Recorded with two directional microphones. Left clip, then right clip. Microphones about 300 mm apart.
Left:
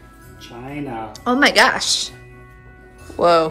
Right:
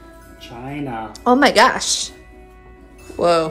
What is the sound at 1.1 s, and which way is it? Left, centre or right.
Speech, centre.